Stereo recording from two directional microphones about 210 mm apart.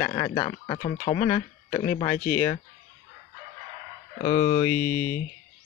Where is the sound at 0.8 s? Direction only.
30° left (ahead or behind).